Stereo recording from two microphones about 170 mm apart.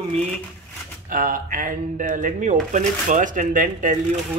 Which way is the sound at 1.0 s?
55° right (ahead or behind).